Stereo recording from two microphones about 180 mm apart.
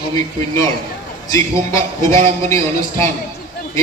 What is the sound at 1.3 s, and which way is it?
A man's voice, 15° left (ahead or behind).